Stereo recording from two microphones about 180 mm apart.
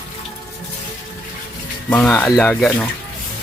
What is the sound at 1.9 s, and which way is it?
Speech, 10° left (ahead or behind).